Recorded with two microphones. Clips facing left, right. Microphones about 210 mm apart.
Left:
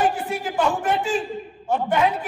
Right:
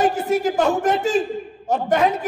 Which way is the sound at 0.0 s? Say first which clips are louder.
Right 5 dB; 40° right (ahead or behind).